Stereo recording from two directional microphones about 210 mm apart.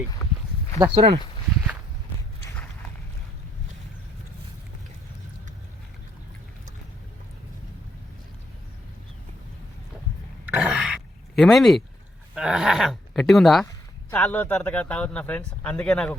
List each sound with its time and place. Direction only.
0.2 s speech: centre (ahead or behind)
0.8 s speech: 20° right (ahead or behind)
10.5 s grunt: 5° right (ahead or behind)
12.3 s speech: 5° right (ahead or behind)